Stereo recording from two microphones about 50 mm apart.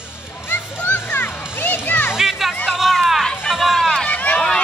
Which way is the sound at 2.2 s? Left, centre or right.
Centre.